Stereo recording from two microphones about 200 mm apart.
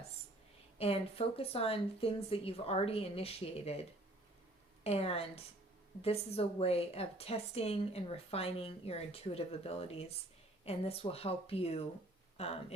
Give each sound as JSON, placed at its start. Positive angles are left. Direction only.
{"t": 0.8, "sound": "a woman's voice", "side_deg": 30}